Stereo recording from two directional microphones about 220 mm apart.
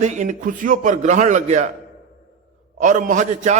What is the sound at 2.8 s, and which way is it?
Speech, 35° right (ahead or behind).